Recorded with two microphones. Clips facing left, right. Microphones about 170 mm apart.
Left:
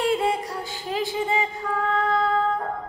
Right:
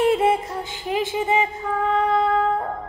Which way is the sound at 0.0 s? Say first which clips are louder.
Right 4 dB; 25° right (ahead or behind).